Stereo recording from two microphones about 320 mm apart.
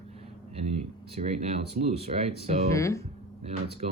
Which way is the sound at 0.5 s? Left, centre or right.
Centre.